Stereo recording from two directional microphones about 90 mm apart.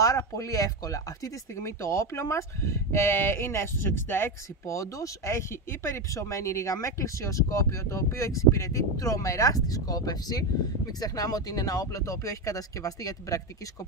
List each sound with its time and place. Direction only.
0.3 s speech: 40° left (ahead or behind)